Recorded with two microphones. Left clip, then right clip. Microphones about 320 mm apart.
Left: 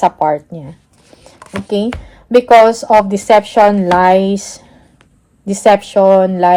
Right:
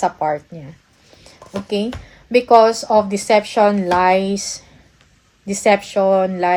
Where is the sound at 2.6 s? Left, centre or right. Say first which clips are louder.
Left 5 dB; left.